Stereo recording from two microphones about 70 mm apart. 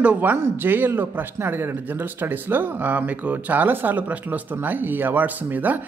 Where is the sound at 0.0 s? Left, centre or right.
Right.